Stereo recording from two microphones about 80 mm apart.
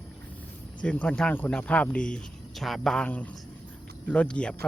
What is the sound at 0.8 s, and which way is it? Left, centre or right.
Speech, centre.